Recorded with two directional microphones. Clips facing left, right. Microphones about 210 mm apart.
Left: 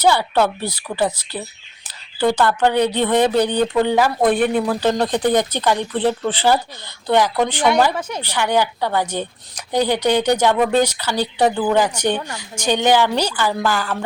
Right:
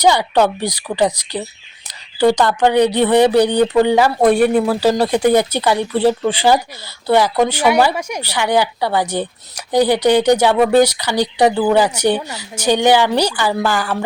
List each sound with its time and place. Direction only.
0.0 s speech: 15° right (ahead or behind)